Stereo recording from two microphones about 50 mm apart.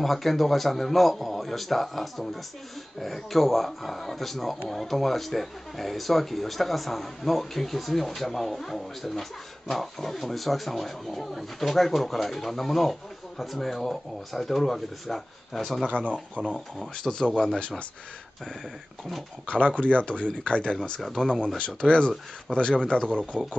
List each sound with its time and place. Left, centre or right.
0.0 s speech: centre
16.1 s speech: right
16.5 s speech: centre
16.9 s speech: centre
17.6 s speech: left
19.6 s speech: left
21.0 s speech: centre
21.5 s speech: left
23.3 s speech: centre